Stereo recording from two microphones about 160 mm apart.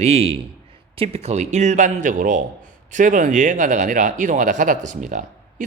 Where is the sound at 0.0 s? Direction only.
40° right (ahead or behind).